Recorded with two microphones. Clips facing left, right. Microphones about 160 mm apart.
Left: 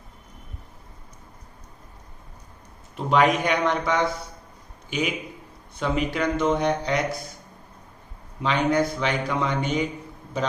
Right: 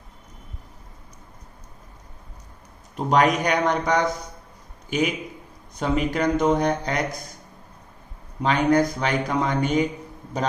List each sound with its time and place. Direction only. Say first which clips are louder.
2.9 s speech: right 1 dB; 40° right (ahead or behind)
8.4 s speech: right 3 dB; 45° right (ahead or behind)